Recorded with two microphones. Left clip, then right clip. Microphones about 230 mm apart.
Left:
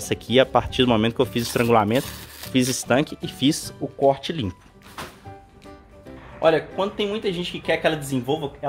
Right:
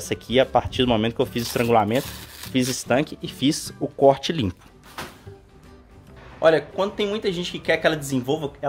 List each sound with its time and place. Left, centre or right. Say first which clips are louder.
0.0 s speech: left 1 dB; centre
4.0 s speech: right 3 dB; right
6.4 s speech: right 1 dB; centre